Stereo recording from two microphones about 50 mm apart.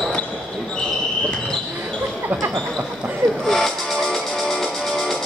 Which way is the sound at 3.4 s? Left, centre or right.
Centre.